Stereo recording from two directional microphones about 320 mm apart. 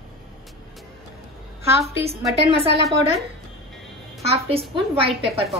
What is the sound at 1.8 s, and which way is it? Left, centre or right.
Speech, centre.